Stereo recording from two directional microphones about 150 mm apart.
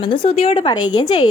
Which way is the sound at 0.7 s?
30° left (ahead or behind).